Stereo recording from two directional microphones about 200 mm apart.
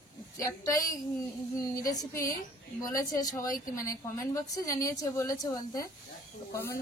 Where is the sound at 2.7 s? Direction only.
15° left (ahead or behind).